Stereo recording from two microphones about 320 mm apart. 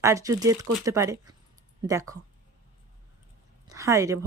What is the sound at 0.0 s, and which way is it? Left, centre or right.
A woman's voice, centre.